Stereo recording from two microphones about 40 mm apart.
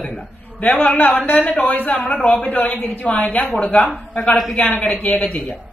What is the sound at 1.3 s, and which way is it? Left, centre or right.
A man's voice, left.